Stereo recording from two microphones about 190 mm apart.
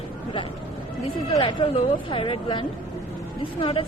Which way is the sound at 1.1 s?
25° left (ahead or behind).